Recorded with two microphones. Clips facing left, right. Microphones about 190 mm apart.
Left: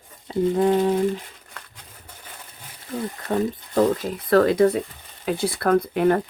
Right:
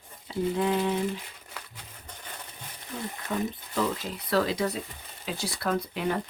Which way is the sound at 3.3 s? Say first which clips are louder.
Left 8 dB; 45° left (ahead or behind).